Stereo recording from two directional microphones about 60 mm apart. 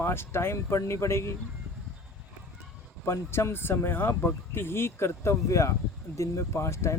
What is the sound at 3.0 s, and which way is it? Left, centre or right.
Speech, left.